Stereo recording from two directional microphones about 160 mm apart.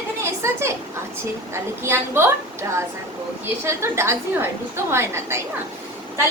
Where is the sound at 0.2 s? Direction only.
15° right (ahead or behind).